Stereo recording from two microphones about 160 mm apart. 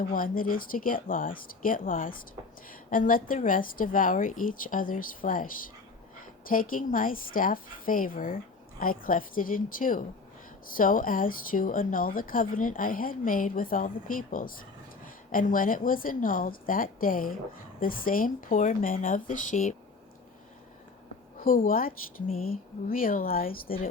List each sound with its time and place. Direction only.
0.1 s a woman's voice: 60° left (ahead or behind)
6.5 s a woman's voice: 60° left (ahead or behind)
21.3 s a woman's voice: 60° left (ahead or behind)